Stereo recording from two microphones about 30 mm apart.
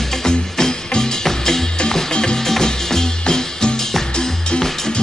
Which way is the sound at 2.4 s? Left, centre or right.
Centre.